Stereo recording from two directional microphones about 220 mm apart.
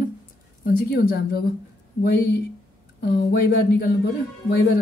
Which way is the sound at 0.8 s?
45° left (ahead or behind).